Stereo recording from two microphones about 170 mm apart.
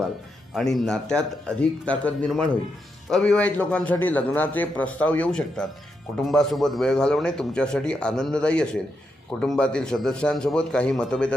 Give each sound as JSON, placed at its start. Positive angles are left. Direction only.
{"t": 0.5, "sound": "a man's voice", "side_deg": 0}